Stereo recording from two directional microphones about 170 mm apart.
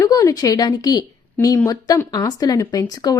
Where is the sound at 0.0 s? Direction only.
20° left (ahead or behind).